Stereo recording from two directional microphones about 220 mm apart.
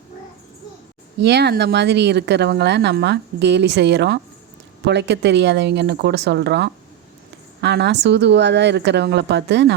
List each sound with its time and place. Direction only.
1.2 s speech: 50° right (ahead or behind)